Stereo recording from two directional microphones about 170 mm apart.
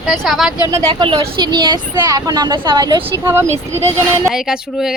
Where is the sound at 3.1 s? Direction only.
15° right (ahead or behind).